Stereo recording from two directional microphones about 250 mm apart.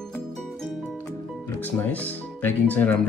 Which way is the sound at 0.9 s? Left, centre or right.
Centre.